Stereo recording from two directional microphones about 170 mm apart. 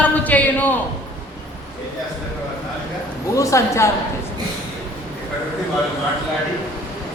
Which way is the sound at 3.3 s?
20° left (ahead or behind).